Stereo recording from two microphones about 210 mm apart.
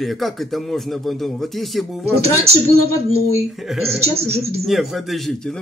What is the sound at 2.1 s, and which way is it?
Speech, 30° right (ahead or behind).